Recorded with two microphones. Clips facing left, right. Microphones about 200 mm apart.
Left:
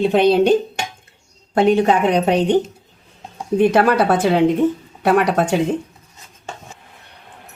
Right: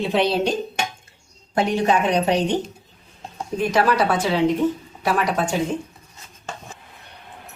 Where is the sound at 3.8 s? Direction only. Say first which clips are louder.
Left 4 dB; 55° left (ahead or behind).